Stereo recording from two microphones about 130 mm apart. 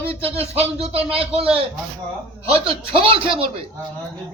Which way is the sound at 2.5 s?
45° right (ahead or behind).